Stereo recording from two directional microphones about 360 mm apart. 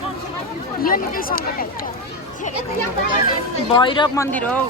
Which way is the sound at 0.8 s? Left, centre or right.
Left.